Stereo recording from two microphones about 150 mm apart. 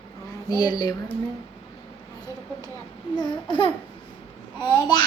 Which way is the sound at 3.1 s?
30° left (ahead or behind).